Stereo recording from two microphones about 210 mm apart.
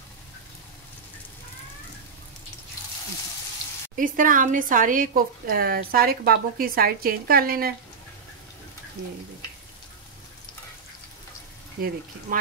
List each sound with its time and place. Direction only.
3.9 s speech: 40° right (ahead or behind)
11.8 s speech: 45° right (ahead or behind)